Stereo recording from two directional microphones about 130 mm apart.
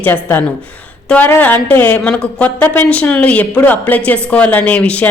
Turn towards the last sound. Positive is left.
turn(degrees=10)  # may be behind; listen again after turning